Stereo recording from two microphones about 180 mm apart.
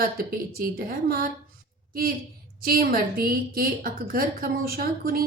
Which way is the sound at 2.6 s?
55° right (ahead or behind).